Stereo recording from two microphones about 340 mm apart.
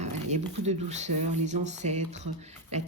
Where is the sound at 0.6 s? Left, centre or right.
Centre.